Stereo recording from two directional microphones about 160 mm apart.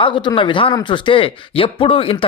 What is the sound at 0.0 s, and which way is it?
Speech, 30° left (ahead or behind).